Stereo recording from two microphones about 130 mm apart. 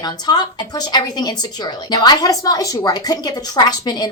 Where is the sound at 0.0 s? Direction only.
30° left (ahead or behind).